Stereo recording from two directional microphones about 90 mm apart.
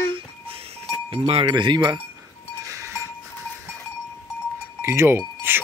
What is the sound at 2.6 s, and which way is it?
Goat, 30° right (ahead or behind).